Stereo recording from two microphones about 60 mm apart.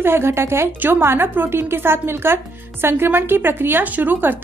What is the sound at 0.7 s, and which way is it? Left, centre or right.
A woman's voice, right.